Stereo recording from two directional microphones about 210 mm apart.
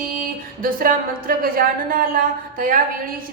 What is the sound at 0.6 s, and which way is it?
A woman's voice, 45° right (ahead or behind).